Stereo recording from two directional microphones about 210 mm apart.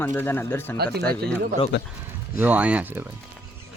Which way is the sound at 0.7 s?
50° right (ahead or behind).